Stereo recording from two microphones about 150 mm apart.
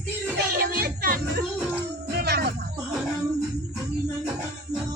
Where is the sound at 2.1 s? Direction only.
90° right.